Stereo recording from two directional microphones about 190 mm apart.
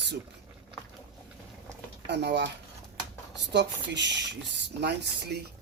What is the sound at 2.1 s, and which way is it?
Cutlery, 65° right (ahead or behind).